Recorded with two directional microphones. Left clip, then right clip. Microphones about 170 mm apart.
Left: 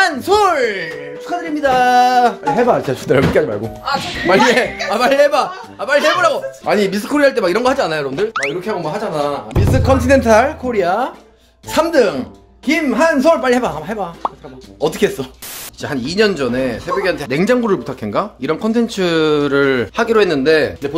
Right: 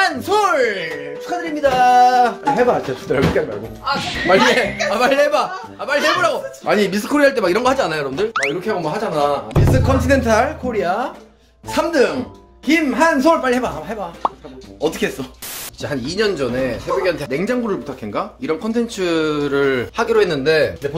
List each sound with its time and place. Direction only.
0.0 s a sound: 35° left (ahead or behind)
1.6 s speech: 45° left (ahead or behind)
2.5 s speech: 60° left (ahead or behind)
3.9 s speech: centre (ahead or behind)
4.9 s speech: 25° left (ahead or behind)
7.0 s speech: 15° left (ahead or behind)
8.3 s speech: centre (ahead or behind)
8.6 s speech: 10° left (ahead or behind)
9.6 s speech: 40° left (ahead or behind)
14.2 s speech: centre (ahead or behind)
14.8 s speech: 40° left (ahead or behind)